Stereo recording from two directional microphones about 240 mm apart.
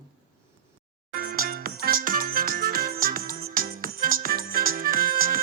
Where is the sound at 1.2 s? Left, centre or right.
Right.